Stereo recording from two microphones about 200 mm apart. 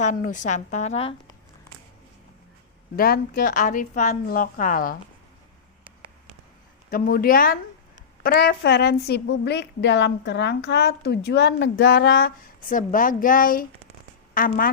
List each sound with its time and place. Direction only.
0.0 s a woman's voice: 40° left (ahead or behind)
2.9 s a woman's voice: 50° left (ahead or behind)
6.9 s a woman's voice: 45° left (ahead or behind)